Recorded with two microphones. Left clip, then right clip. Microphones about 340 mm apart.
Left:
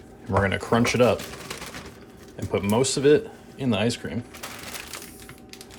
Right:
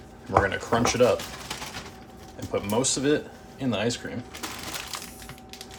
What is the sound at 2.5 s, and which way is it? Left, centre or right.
Speech, centre.